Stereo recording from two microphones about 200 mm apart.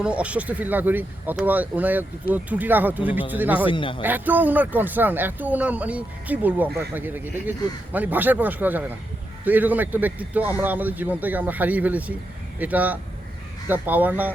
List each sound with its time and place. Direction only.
0.0 s speech: 5° right (ahead or behind)
3.7 s speech: 25° left (ahead or behind)
4.0 s speech: 10° right (ahead or behind)